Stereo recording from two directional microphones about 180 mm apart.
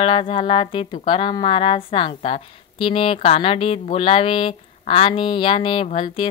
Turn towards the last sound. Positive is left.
turn(degrees=30)  # may be behind; listen again after turning